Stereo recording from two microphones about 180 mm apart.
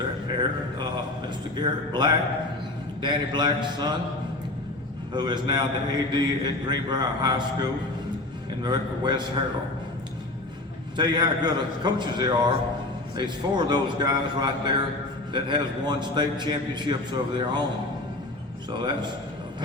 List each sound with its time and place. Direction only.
1.5 s a man's voice: 25° right (ahead or behind)
5.1 s a man's voice: 25° right (ahead or behind)
10.9 s a man's voice: 25° right (ahead or behind)
18.8 s a man's voice: 25° right (ahead or behind)